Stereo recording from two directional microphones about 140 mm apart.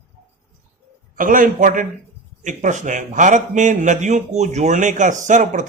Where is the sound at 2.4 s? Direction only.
60° right (ahead or behind).